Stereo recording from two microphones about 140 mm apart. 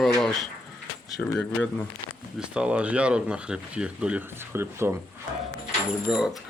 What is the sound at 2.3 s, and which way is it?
Speech, 5° right (ahead or behind).